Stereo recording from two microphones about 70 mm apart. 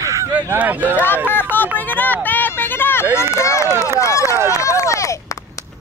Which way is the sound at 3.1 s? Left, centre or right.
Left.